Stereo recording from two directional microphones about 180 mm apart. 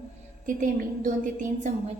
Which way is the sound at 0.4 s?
50° right (ahead or behind).